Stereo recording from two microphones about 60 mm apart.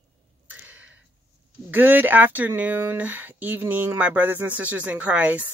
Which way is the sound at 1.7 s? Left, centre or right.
Right.